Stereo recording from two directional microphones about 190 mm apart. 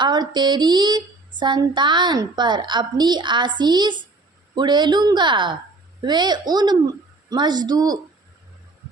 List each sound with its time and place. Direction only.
0.0 s speech: 25° right (ahead or behind)